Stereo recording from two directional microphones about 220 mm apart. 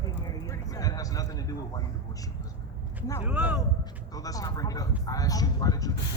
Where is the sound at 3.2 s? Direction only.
5° right (ahead or behind).